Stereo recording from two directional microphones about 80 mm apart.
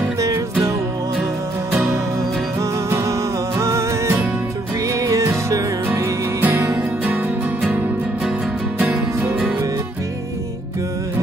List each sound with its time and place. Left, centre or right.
0.2 s music: right
2.6 s music: right
8.7 s music: right